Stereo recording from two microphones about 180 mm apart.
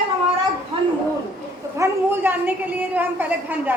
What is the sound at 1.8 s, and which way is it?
A woman's voice, 10° right (ahead or behind).